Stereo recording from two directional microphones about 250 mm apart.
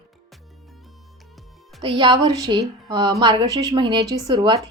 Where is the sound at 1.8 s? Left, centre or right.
Centre.